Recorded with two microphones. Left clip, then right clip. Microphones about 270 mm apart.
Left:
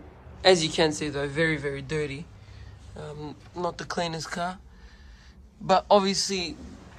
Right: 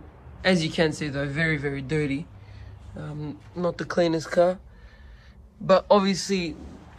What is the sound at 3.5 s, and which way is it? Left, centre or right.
Speech, centre.